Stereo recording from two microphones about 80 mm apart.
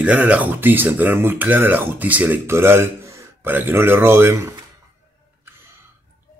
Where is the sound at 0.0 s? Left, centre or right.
Centre; by 4.5 s right.